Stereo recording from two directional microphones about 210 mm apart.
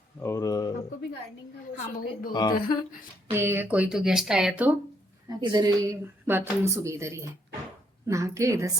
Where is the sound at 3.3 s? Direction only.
10° right (ahead or behind).